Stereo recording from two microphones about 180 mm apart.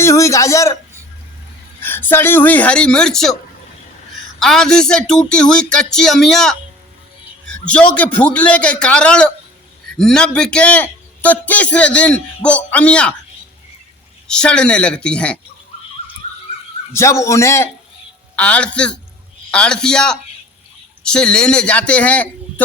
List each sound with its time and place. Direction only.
0.0 s a man's voice: 15° left (ahead or behind)
1.8 s a man's voice: 10° left (ahead or behind)
4.4 s speech: 5° left (ahead or behind)
7.4 s a sound: 5° left (ahead or behind)
7.9 s a man's voice: 10° left (ahead or behind)
14.3 s speech: 5° left (ahead or behind)
16.9 s a man's voice: 15° left (ahead or behind)